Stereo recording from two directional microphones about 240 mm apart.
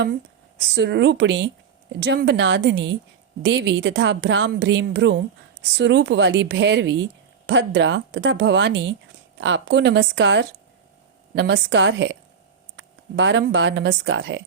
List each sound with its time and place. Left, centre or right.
0.7 s a woman's voice: right